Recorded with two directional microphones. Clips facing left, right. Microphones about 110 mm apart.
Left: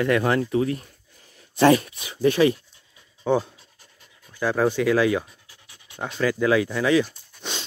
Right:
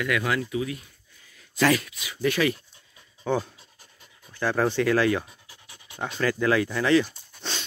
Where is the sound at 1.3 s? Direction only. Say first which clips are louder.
Left 6 dB; 25° left (ahead or behind).